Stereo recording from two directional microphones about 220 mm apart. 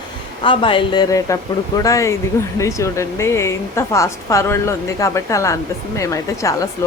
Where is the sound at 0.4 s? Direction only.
25° left (ahead or behind).